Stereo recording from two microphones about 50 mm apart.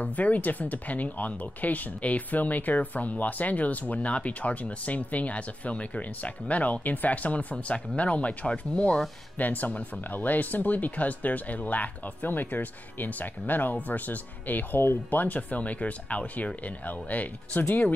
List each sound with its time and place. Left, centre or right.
0.0 s speech: left
9.4 s speech: left